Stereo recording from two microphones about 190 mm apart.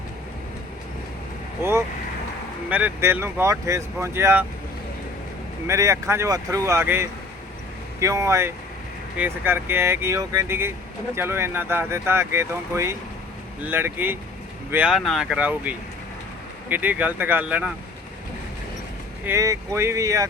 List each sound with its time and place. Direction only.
2.6 s speech: 10° right (ahead or behind)
5.6 s speech: 15° right (ahead or behind)
19.2 s speech: 15° right (ahead or behind)